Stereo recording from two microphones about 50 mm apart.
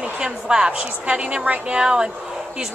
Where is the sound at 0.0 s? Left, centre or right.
Centre.